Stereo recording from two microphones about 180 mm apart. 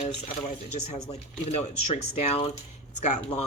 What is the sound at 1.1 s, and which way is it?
Speech, 35° left (ahead or behind).